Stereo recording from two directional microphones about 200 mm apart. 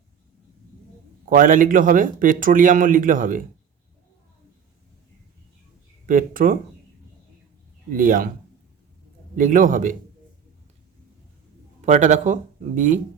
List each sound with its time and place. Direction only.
1.2 s a man's voice: 45° right (ahead or behind)
6.1 s a man's voice: 45° right (ahead or behind)
7.9 s a man's voice: 45° right (ahead or behind)
9.3 s a man's voice: 40° right (ahead or behind)
11.8 s speech: 35° right (ahead or behind)